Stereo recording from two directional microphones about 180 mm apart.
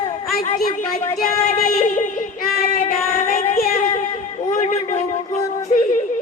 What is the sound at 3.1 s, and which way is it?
Child singing, 35° left (ahead or behind).